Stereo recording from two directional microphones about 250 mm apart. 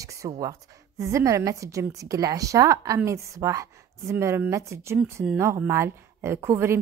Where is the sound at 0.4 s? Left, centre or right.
Centre.